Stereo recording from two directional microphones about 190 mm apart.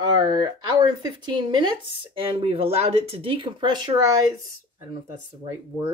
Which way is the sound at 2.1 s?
30° right (ahead or behind).